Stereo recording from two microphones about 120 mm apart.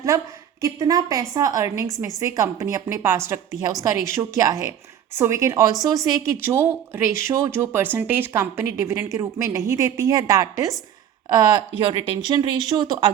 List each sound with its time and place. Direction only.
0.1 s a woman's voice: 25° right (ahead or behind)
11.3 s speech: 40° right (ahead or behind)